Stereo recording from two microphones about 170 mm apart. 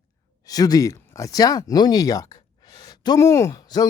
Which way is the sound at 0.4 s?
20° left (ahead or behind).